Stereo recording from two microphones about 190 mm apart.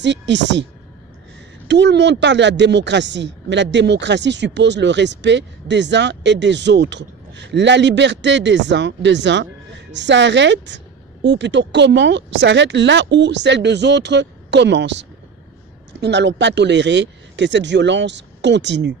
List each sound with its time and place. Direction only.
0.0 s a woman's voice: 65° right (ahead or behind)
1.7 s a woman's voice: 65° right (ahead or behind)